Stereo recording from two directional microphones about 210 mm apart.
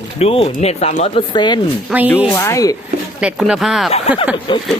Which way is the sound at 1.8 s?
10° right (ahead or behind).